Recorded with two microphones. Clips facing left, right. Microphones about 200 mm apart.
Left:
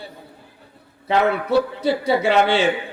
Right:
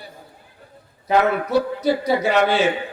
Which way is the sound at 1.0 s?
25° left (ahead or behind).